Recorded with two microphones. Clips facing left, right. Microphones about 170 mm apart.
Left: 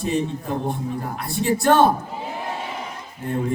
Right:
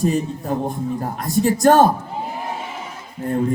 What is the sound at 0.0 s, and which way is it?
Speech, 40° right (ahead or behind).